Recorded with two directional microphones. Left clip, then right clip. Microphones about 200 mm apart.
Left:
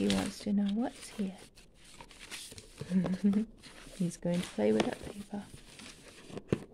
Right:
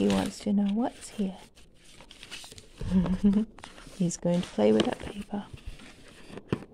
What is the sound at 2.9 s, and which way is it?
Speech, 10° right (ahead or behind).